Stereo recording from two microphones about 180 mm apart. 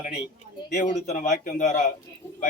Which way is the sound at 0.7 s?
40° left (ahead or behind).